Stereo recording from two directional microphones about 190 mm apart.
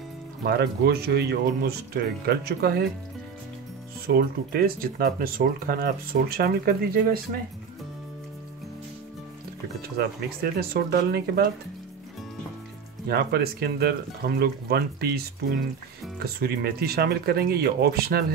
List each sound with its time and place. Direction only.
0.5 s speech: 55° right (ahead or behind)
4.1 s speech: 50° right (ahead or behind)
9.9 s speech: 55° right (ahead or behind)
13.1 s speech: 55° right (ahead or behind)
16.3 s speech: 55° right (ahead or behind)